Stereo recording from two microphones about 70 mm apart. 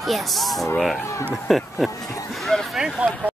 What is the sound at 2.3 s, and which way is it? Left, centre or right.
Bow-wow, centre.